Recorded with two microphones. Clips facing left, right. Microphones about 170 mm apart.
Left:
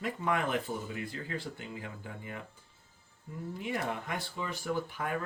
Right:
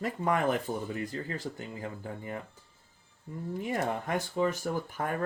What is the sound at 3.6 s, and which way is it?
Speech, 45° right (ahead or behind).